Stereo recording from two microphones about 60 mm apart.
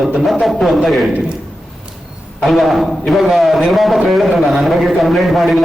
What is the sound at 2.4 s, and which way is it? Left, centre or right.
A man's voice, centre.